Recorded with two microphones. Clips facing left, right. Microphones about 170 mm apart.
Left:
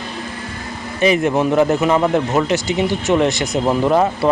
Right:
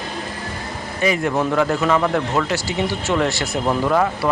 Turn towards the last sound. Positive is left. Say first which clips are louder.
# left 3 dB
turn(degrees=20)  # may be behind; listen again after turning